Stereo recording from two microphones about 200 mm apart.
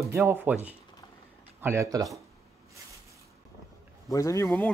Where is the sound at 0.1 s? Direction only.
10° right (ahead or behind).